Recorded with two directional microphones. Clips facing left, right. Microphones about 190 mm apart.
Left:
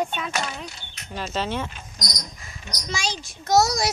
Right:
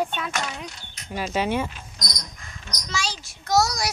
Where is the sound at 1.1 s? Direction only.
10° right (ahead or behind).